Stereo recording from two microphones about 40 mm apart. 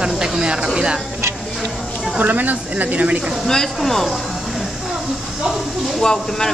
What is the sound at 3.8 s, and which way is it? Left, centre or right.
Speech, centre.